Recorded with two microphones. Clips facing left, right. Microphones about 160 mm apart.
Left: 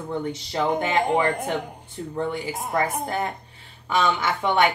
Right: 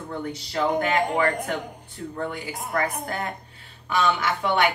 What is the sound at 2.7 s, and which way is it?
A woman's voice, 25° left (ahead or behind).